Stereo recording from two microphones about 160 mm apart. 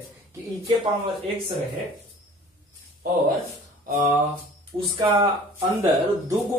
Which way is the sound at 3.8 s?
55° right (ahead or behind).